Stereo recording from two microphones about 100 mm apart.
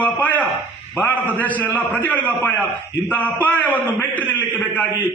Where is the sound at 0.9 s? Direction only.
15° left (ahead or behind).